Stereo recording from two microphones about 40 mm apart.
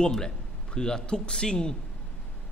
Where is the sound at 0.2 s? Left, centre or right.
Centre.